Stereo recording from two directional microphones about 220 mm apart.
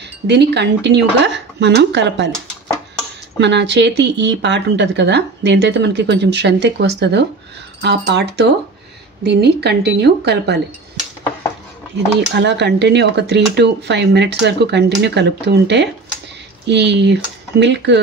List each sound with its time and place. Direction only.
0.0 s speech: 50° right (ahead or behind)
3.3 s speech: 55° right (ahead or behind)
12.4 s speech: 50° right (ahead or behind)